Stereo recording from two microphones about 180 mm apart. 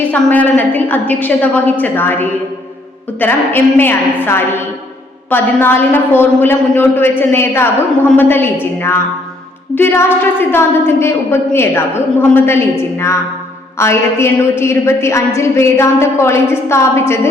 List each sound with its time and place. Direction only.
0.1 s a woman's voice: 10° left (ahead or behind)
9.7 s a woman's voice: 15° left (ahead or behind)
13.7 s a woman's voice: 15° left (ahead or behind)